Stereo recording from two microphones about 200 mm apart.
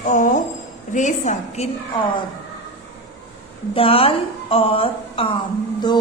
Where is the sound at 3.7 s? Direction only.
30° left (ahead or behind).